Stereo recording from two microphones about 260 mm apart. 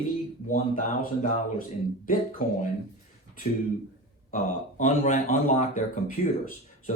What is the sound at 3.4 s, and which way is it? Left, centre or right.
Speech, left.